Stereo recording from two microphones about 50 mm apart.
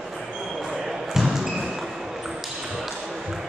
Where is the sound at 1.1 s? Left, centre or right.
Centre.